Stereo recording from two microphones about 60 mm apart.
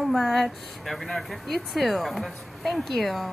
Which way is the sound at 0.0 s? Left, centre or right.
Centre.